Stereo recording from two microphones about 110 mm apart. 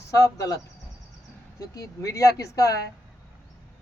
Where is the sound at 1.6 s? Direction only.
30° left (ahead or behind).